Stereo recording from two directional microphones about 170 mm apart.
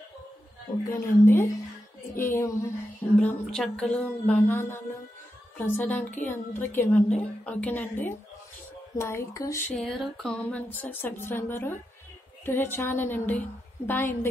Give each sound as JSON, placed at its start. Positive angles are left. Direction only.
{"t": 0.8, "sound": "a woman's voice", "side_deg": 15}
{"t": 9.8, "sound": "a woman's voice", "side_deg": 0}